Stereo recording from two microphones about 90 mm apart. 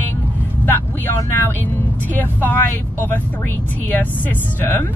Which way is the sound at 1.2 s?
30° left (ahead or behind).